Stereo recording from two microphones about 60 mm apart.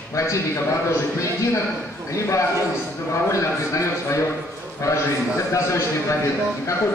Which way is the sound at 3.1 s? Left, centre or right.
Left.